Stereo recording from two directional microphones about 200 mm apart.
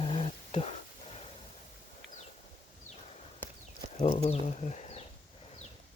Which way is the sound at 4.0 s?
30° left (ahead or behind).